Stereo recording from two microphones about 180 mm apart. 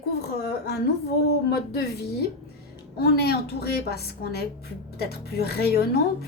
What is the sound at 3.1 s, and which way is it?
A woman's voice, 60° left (ahead or behind).